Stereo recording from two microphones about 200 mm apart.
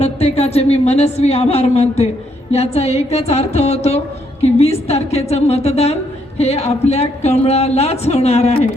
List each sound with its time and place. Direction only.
0.0 s speech: 30° left (ahead or behind)